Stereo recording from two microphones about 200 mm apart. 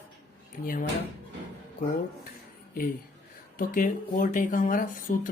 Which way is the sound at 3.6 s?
45° left (ahead or behind).